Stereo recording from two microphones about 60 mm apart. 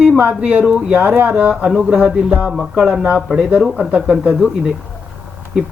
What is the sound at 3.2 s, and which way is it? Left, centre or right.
Speech, centre.